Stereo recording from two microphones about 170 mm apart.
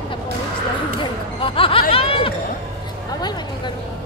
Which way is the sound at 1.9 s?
35° left (ahead or behind).